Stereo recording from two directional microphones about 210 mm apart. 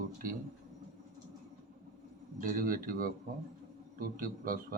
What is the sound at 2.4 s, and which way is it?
Speech, 40° right (ahead or behind).